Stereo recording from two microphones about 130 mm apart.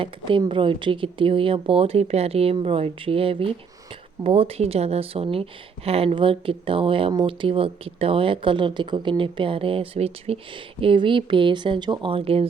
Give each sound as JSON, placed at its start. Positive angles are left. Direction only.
{"t": 0.0, "sound": "speech", "side_deg": -40}